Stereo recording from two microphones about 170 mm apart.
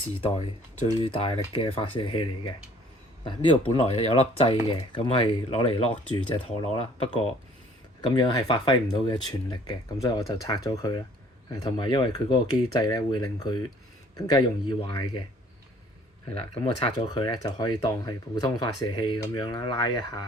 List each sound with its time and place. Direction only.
0.2 s speech: 35° left (ahead or behind)
8.0 s speech: 25° left (ahead or behind)
16.3 s speech: 30° left (ahead or behind)